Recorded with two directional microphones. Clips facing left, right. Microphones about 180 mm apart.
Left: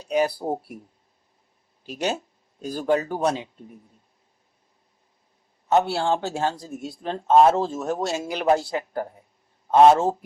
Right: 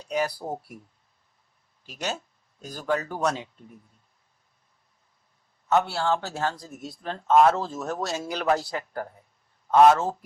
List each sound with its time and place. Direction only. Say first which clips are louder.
0.0 s speech: left 5 dB; 30° left (ahead or behind)
1.9 s a man's voice: left 6 dB; 30° left (ahead or behind)
5.6 s a man's voice: left 3 dB; 25° left (ahead or behind)